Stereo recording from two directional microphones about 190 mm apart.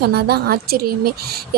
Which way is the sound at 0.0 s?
55° right (ahead or behind).